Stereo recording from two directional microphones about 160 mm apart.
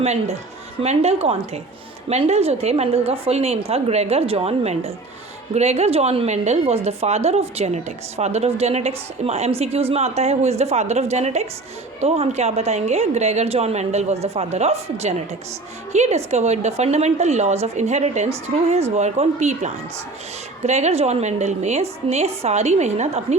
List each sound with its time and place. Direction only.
0.0 s a woman's voice: 40° right (ahead or behind)